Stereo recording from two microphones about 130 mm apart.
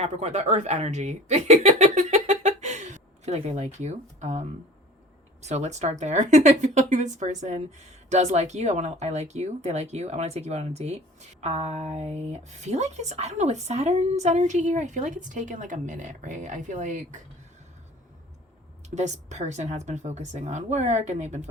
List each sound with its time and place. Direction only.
0.0 s speech: 55° right (ahead or behind); by 17.2 s 75° right (ahead or behind)
18.9 s speech: 60° right (ahead or behind)